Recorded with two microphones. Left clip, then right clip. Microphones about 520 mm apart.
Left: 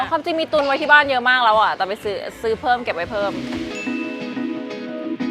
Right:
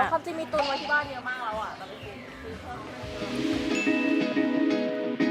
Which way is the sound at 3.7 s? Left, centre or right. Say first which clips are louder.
Right 1 dB; centre.